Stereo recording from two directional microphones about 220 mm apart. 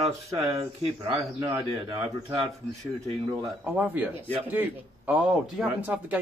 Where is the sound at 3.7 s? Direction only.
10° right (ahead or behind).